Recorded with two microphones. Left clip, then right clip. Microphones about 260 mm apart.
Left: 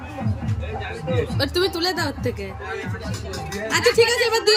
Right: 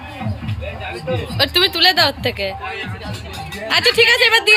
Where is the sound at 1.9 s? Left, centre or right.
Centre.